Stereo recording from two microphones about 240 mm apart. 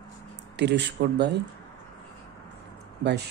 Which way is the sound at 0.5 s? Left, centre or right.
Right.